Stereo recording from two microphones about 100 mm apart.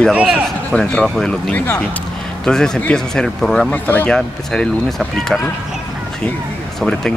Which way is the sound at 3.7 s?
20° left (ahead or behind).